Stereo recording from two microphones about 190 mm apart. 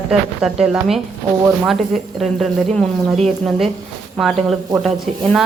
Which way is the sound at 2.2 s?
Centre (ahead or behind).